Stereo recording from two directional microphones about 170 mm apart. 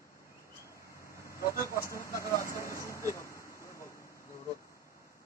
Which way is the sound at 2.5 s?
20° right (ahead or behind).